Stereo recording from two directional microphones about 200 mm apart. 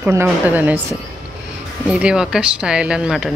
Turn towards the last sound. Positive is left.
turn(degrees=-5)  # may be behind; listen again after turning